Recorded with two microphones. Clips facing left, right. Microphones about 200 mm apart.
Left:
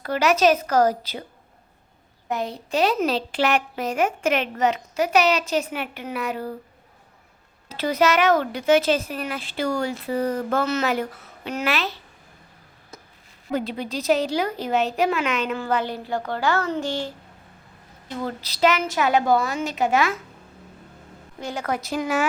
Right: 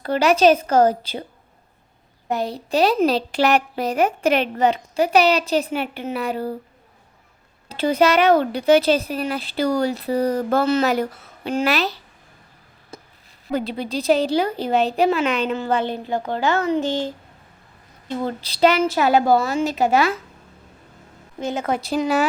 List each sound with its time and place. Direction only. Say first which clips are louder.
0.0 s a woman's voice: right 3 dB; 30° right (ahead or behind)
2.3 s a woman's voice: right 3 dB; 35° right (ahead or behind)
7.7 s a woman's voice: right 3 dB; 30° right (ahead or behind)
12.9 s a sound: right 5 dB; 30° right (ahead or behind)
13.5 s a woman's voice: right 2 dB; 30° right (ahead or behind)
18.2 s a woman's voice: right 4 dB; 25° right (ahead or behind)
21.4 s a woman's voice: right 4 dB; 20° right (ahead or behind)